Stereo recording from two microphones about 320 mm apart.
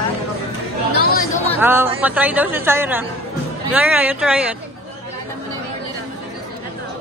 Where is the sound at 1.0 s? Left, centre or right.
Left.